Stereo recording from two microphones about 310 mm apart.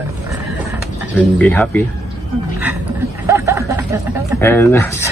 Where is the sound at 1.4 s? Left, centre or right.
Centre.